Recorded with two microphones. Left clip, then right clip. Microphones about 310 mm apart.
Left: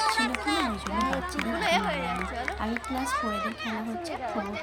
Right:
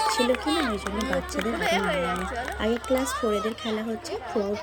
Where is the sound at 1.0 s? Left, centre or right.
Centre.